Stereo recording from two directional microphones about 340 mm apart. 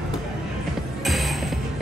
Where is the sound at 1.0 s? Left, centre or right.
Centre.